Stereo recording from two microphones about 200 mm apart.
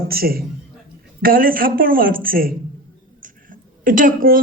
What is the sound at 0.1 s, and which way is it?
A man's voice, 50° right (ahead or behind).